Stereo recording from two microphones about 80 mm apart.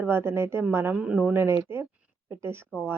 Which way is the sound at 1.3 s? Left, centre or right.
Right.